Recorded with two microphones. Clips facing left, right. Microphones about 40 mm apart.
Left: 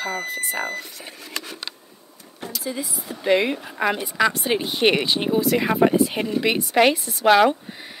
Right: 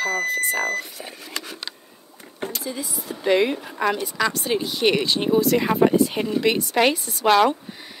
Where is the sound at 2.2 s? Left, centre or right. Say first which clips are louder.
Right 4 dB; right.